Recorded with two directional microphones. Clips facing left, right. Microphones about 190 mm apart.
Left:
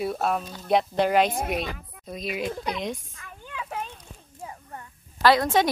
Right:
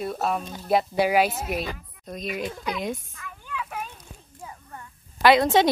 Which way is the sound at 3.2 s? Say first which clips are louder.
Right 3 dB; 30° left (ahead or behind).